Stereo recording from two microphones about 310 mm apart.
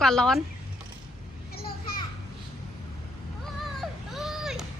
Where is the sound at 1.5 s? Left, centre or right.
Left.